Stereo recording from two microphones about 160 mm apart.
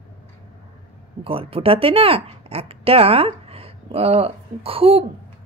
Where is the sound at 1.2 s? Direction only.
35° right (ahead or behind).